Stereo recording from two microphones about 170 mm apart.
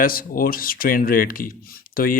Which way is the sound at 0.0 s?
55° left (ahead or behind).